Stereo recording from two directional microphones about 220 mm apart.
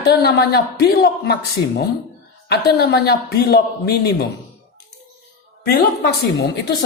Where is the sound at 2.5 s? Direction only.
45° left (ahead or behind).